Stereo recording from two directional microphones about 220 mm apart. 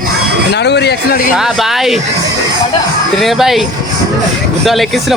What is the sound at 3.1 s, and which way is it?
Speech, centre (ahead or behind).